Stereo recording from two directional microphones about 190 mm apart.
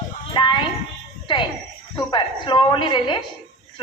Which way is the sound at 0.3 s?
25° left (ahead or behind).